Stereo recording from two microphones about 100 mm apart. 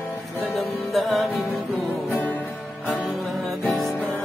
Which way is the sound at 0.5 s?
Centre (ahead or behind).